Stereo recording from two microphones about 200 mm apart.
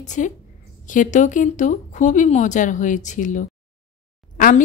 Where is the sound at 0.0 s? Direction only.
40° left (ahead or behind).